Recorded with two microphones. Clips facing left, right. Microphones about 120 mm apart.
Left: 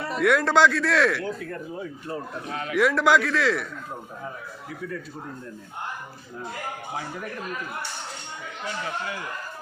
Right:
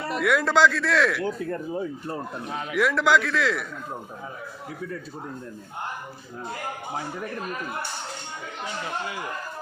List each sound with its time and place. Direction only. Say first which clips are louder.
0.1 s a man's voice: left 2 dB; centre (ahead or behind)
1.2 s speech: right 3 dB; 25° right (ahead or behind)
2.4 s a man's voice: left 2 dB; 5° right (ahead or behind)